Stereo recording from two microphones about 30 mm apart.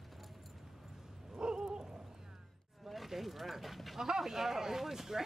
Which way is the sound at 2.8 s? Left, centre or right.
Centre.